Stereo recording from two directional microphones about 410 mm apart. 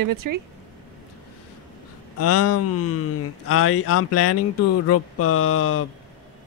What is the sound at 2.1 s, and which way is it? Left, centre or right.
Speech, left.